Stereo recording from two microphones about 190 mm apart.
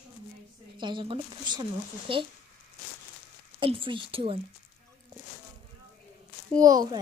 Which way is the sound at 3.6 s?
25° right (ahead or behind).